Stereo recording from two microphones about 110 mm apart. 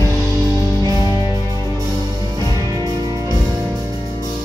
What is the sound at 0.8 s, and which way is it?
Music, 35° right (ahead or behind).